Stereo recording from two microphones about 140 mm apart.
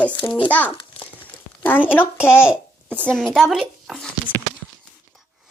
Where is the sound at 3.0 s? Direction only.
5° left (ahead or behind).